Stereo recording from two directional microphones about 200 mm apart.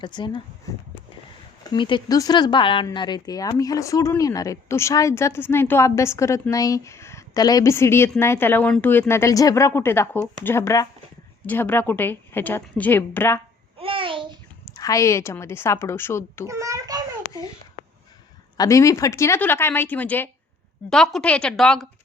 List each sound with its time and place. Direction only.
0.0 s speech: 25° left (ahead or behind)
1.6 s speech: 25° left (ahead or behind)
13.7 s a sound: 25° right (ahead or behind)
14.6 s speech: 15° left (ahead or behind)
16.5 s a sound: 15° right (ahead or behind)
18.5 s speech: 15° left (ahead or behind)